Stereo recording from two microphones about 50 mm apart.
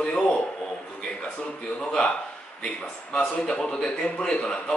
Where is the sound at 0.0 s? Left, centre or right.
Centre.